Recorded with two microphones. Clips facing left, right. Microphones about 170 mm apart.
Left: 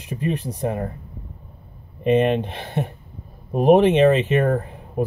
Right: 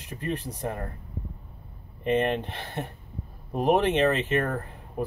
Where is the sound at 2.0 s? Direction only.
20° left (ahead or behind).